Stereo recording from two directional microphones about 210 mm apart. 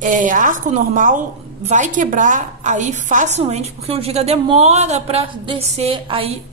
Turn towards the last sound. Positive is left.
turn(degrees=-25)  # may be behind; listen again after turning